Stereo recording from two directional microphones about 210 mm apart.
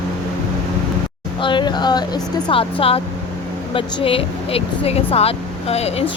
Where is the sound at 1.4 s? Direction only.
20° left (ahead or behind).